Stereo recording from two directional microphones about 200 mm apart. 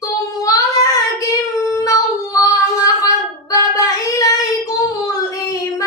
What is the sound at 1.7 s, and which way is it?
Dog, 15° left (ahead or behind).